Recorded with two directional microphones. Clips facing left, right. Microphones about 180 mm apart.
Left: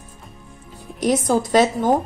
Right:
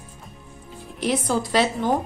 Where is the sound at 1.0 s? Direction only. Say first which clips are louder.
Left 5 dB; 45° left (ahead or behind).